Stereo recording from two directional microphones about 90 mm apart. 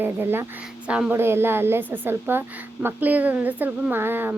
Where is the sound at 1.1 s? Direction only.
25° right (ahead or behind).